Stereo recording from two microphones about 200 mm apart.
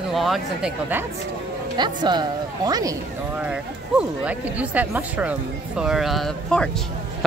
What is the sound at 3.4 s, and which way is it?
Speech, 5° right (ahead or behind).